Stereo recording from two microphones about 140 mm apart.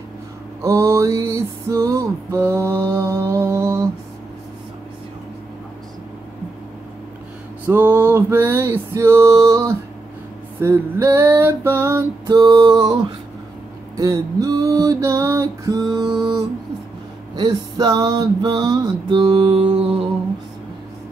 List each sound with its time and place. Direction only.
0.6 s music: 20° right (ahead or behind)
7.6 s male singing: 15° right (ahead or behind)
12.4 s music: 30° right (ahead or behind)
13.9 s music: 25° right (ahead or behind)
17.4 s male singing: 30° right (ahead or behind)